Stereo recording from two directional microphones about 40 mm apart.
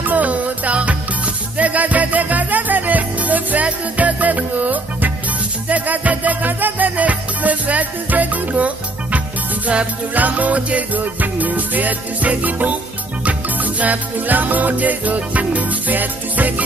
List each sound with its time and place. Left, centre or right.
0.0 s music: right